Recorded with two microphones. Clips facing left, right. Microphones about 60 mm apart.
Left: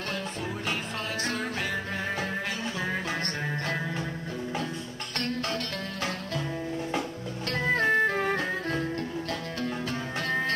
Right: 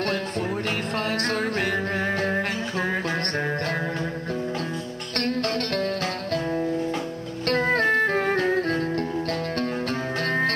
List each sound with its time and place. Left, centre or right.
1.1 s music: right
5.1 s music: right
7.4 s music: right